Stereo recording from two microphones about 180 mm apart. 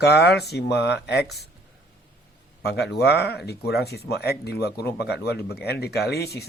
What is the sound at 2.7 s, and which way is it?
Speech, 65° left (ahead or behind).